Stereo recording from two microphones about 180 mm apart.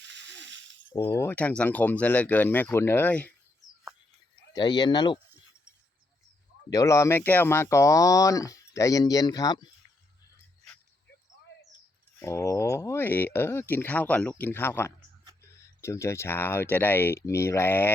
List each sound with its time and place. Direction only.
0.0 s a sound: 80° right
0.9 s speech: 15° left (ahead or behind)
4.5 s speech: 25° left (ahead or behind)
6.7 s speech: 20° left (ahead or behind)
12.2 s speech: 15° left (ahead or behind)